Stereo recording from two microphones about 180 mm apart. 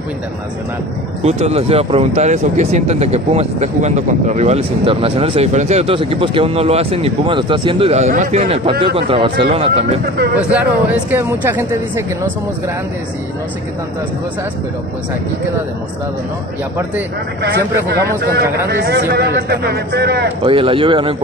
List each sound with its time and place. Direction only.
1.2 s speech: 35° right (ahead or behind)
10.3 s speech: 10° right (ahead or behind)
17.4 s a man's voice: 70° right (ahead or behind)
20.4 s speech: 30° right (ahead or behind)